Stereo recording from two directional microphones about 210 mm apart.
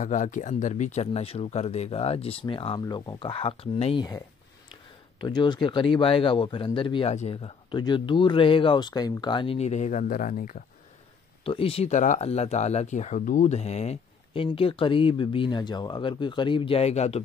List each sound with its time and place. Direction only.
0.0 s speech: 35° left (ahead or behind); by 4.2 s 20° left (ahead or behind)
5.2 s speech: 20° left (ahead or behind); by 10.6 s 40° left (ahead or behind)
11.4 s speech: 25° left (ahead or behind)